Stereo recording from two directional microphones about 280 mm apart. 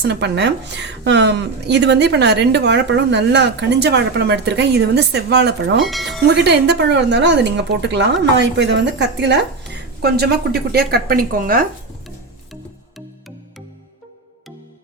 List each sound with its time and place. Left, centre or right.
0.0 s a woman's voice: right
5.8 s speech: centre
6.2 s a woman's voice: right